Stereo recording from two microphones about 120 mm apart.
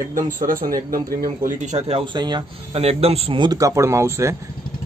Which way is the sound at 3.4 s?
30° right (ahead or behind).